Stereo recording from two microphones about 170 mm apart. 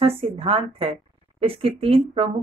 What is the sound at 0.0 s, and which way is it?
Speech, 35° right (ahead or behind).